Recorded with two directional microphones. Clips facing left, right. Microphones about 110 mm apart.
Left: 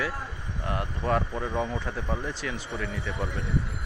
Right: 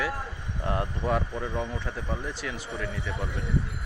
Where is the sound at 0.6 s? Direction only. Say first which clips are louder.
Right 2 dB; 25° right (ahead or behind).